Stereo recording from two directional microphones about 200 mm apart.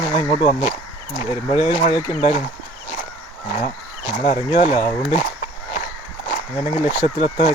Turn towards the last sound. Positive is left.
turn(degrees=25)  # may be behind; listen again after turning